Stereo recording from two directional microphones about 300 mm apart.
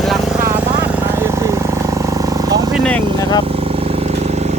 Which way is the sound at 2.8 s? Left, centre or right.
Centre.